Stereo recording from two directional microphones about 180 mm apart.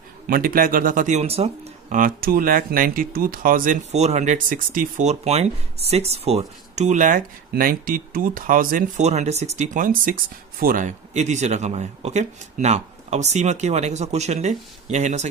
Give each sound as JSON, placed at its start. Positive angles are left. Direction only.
{"t": 0.3, "sound": "speech", "side_deg": -55}